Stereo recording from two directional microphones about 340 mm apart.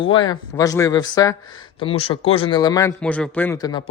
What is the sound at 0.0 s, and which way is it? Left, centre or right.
A man's voice, centre.